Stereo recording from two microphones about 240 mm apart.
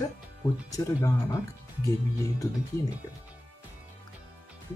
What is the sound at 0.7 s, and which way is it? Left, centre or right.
Speech, centre.